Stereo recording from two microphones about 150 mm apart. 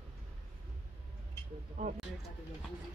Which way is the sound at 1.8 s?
55° right (ahead or behind).